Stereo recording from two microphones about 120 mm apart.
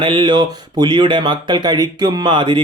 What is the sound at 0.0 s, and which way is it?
Speech, 45° right (ahead or behind).